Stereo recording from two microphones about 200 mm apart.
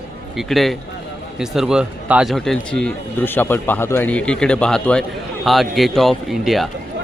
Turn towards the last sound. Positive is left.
turn(degrees=0)  # may be behind; listen again after turning